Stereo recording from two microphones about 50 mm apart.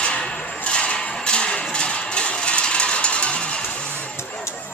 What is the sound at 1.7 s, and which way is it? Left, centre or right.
Music, centre.